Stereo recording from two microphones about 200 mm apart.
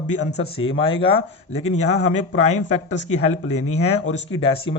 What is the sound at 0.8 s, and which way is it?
Speech, 25° left (ahead or behind).